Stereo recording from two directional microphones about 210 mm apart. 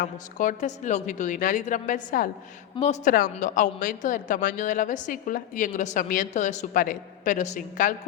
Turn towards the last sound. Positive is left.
turn(degrees=35)  # may be behind; listen again after turning